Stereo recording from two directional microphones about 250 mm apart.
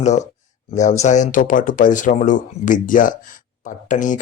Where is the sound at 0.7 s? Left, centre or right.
Left.